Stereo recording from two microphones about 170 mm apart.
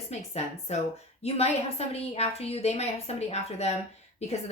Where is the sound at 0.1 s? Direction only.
40° left (ahead or behind).